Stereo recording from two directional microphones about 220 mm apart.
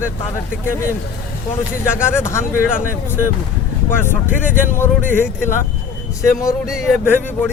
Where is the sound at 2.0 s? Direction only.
10° left (ahead or behind).